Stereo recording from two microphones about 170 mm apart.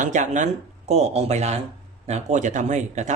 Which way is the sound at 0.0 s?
45° right (ahead or behind).